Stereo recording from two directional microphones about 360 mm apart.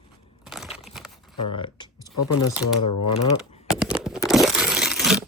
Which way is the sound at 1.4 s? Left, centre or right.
Centre.